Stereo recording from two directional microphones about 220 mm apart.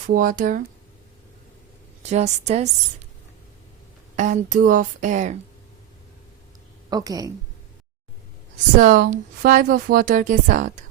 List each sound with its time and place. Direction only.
0.0 s speech: 40° right (ahead or behind)
2.0 s a woman's voice: 30° right (ahead or behind)
4.2 s speech: 35° right (ahead or behind)
6.9 s a woman's voice: 15° right (ahead or behind)
8.8 s speech: 35° right (ahead or behind)